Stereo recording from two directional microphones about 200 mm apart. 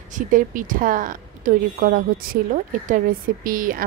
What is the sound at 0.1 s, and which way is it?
A woman's voice, 40° right (ahead or behind).